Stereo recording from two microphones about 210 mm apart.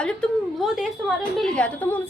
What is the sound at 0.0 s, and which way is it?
A woman's voice, centre (ahead or behind).